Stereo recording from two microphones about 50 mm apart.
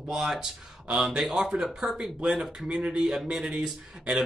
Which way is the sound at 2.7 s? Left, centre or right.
Right.